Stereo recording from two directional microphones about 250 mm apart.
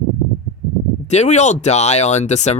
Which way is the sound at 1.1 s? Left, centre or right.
Left.